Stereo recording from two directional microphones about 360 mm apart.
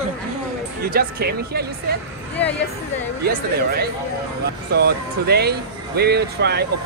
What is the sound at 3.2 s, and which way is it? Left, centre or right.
Speech, right.